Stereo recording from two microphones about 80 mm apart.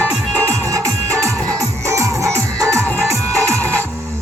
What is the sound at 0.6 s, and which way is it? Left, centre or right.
Music, right.